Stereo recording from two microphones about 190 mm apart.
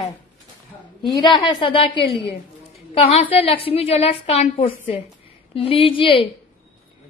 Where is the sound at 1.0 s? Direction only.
25° left (ahead or behind).